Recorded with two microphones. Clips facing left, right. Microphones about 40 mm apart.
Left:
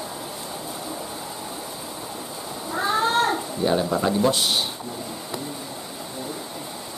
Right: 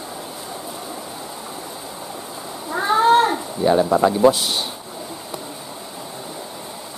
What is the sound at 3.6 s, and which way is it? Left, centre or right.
Speech, centre.